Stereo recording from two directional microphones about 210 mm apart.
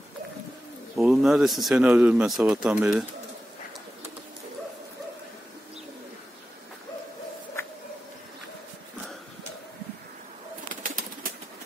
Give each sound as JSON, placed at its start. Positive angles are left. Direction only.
{"t": 0.9, "sound": "speech", "side_deg": 0}
{"t": 7.6, "sound": "a sound", "side_deg": 15}
{"t": 10.7, "sound": "bird", "side_deg": -40}